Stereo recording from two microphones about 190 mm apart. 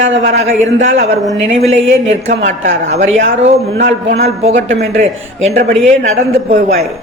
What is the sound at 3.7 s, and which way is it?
Speech, 75° right (ahead or behind).